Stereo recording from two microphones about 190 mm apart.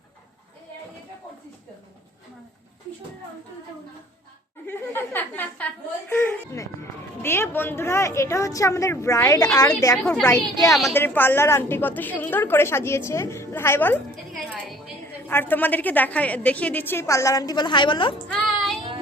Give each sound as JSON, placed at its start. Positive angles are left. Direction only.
{"t": 4.6, "sound": "a sound", "side_deg": 10}
{"t": 7.2, "sound": "a woman's voice", "side_deg": 10}
{"t": 18.3, "sound": "child singing", "side_deg": 0}